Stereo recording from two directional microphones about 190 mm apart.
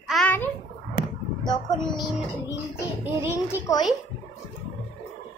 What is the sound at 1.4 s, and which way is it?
Speech, 20° left (ahead or behind).